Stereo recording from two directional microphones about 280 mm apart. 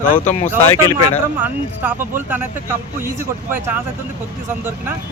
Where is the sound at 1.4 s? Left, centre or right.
Centre.